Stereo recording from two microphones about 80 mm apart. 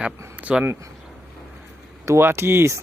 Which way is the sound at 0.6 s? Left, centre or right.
Right.